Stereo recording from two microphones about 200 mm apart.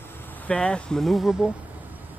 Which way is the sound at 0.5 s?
5° left (ahead or behind).